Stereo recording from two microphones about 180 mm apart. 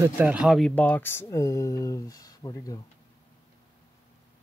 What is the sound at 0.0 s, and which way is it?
Speech, 5° right (ahead or behind).